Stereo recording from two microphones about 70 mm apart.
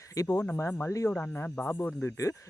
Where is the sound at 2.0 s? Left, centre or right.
Left.